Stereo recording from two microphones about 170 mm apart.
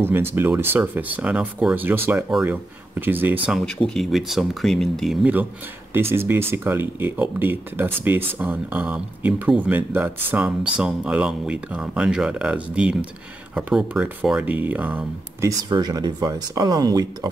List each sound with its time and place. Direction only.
0.0 s speech: 15° right (ahead or behind)
3.4 s speech: centre (ahead or behind)
15.7 s speech: 25° right (ahead or behind)